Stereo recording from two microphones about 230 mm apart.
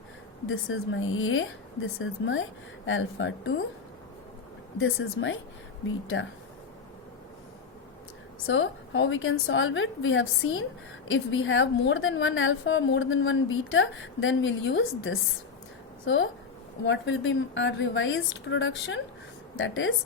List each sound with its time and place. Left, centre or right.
0.4 s a woman's voice: left
4.8 s a woman's voice: left
8.4 s a woman's voice: left